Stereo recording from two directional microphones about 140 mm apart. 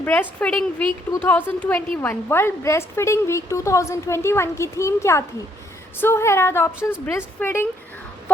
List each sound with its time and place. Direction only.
0.0 s a woman's voice: 15° left (ahead or behind)